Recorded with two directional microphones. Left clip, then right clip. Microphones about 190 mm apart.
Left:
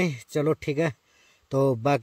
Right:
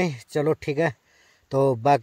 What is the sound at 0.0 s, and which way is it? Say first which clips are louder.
Speech: right 2 dB; 20° left (ahead or behind).